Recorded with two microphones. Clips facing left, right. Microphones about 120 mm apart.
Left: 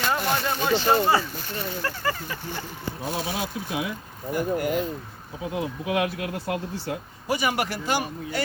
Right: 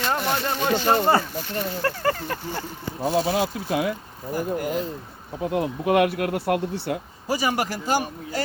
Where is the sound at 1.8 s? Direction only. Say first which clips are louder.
Right 6 dB; 55° right (ahead or behind).